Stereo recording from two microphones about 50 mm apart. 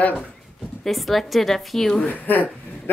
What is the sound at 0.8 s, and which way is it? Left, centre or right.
A woman's voice, centre.